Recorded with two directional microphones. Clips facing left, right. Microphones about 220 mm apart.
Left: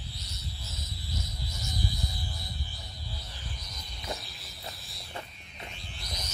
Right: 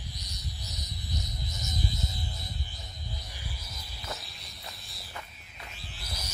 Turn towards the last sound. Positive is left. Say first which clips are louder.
# left 1 dB
turn(degrees=-5)  # may be behind; listen again after turning